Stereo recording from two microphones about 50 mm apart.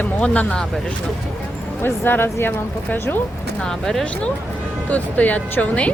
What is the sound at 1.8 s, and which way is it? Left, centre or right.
Speech, left.